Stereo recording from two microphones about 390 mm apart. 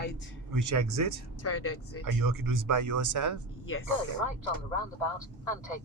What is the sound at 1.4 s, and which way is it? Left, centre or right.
Speech, left.